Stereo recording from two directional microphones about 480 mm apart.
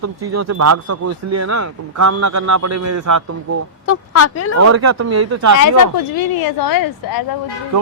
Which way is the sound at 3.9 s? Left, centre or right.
Left.